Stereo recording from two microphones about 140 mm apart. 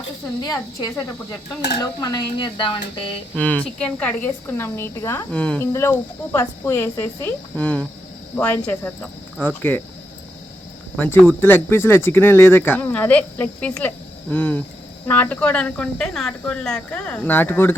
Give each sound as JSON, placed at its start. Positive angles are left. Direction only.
{"t": 1.8, "sound": "speech", "side_deg": 25}
{"t": 3.3, "sound": "speech", "side_deg": 10}
{"t": 10.9, "sound": "speech", "side_deg": 10}